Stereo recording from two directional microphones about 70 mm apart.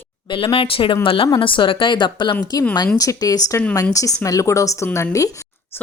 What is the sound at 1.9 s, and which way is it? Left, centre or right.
Speech, left.